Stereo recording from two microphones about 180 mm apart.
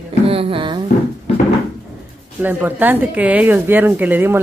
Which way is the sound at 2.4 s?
10° right (ahead or behind).